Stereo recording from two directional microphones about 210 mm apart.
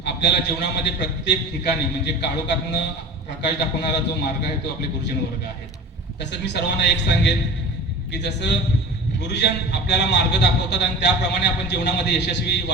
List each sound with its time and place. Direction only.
0.0 s a man's voice: 55° left (ahead or behind)
6.1 s a man's voice: 55° left (ahead or behind)